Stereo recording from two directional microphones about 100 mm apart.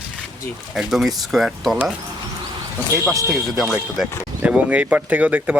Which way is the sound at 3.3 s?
Centre (ahead or behind).